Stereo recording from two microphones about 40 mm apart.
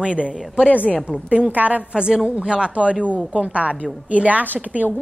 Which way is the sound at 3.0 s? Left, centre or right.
Right.